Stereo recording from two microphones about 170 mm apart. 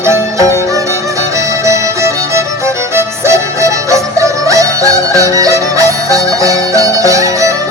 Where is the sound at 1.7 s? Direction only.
15° right (ahead or behind).